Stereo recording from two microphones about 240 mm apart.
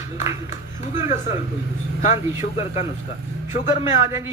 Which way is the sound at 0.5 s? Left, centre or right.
Left.